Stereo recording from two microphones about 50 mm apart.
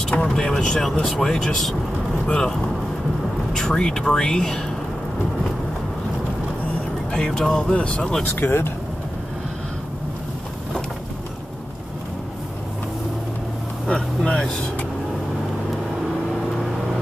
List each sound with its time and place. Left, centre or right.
0.2 s speech: centre
2.2 s speech: left
3.5 s speech: centre
7.1 s speech: centre
8.2 s speech: left
13.8 s vehicle: centre